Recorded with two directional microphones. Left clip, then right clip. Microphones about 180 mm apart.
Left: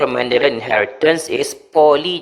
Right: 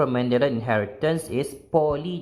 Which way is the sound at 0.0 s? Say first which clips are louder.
Left 7 dB; 35° left (ahead or behind).